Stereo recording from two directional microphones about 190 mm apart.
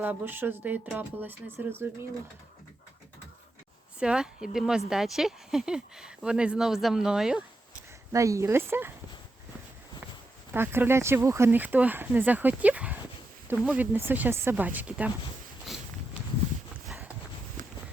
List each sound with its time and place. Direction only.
0.0 s speech: 10° right (ahead or behind)
4.0 s speech: 5° right (ahead or behind)
8.1 s speech: 15° right (ahead or behind)
10.5 s speech: 10° right (ahead or behind)
15.7 s walk: centre (ahead or behind)